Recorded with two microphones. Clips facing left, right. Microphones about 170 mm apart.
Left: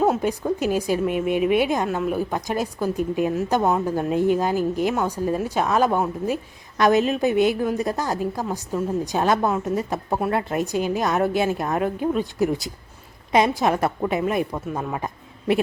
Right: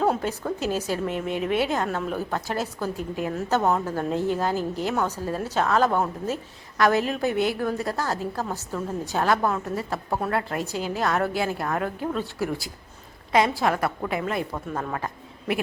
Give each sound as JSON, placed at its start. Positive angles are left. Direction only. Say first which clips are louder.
{"t": 0.0, "sound": "a woman's voice", "louder": "left 4 dB", "side_deg": 15}